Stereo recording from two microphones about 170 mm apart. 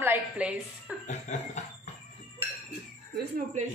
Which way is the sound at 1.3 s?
45° left (ahead or behind).